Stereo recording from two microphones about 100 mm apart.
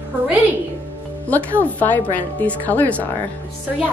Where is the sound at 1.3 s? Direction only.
15° left (ahead or behind).